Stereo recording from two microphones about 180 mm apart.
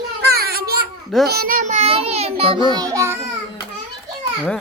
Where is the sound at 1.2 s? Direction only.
55° right (ahead or behind); by 3.1 s 20° right (ahead or behind).